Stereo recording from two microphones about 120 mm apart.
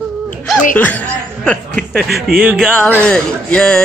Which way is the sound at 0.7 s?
15° left (ahead or behind).